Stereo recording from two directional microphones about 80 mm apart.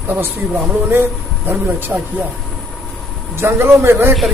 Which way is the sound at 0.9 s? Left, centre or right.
Right.